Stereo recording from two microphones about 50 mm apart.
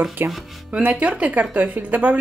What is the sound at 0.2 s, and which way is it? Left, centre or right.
Speech, right.